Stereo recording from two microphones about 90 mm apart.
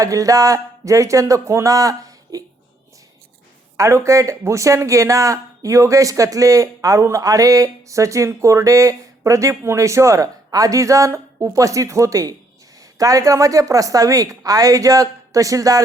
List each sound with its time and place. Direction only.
0.0 s speech: 40° right (ahead or behind)
3.8 s speech: 35° right (ahead or behind)